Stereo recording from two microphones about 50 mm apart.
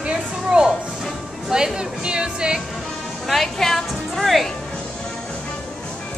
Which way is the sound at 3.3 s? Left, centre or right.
Centre.